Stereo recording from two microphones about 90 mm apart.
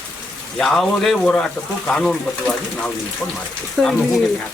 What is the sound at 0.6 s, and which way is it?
Speech, 5° left (ahead or behind).